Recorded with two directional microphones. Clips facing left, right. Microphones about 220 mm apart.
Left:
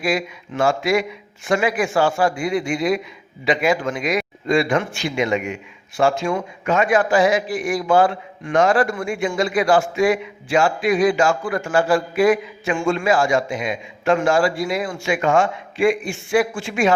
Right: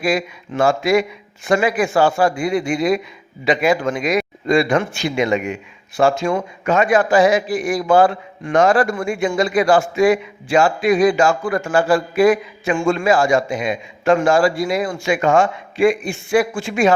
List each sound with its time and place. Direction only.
0.0 s a man's voice: 40° right (ahead or behind)
9.2 s a man's voice: 40° right (ahead or behind)